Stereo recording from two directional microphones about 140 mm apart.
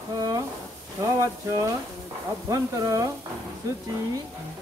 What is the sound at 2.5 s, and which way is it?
Sizzle, 25° right (ahead or behind).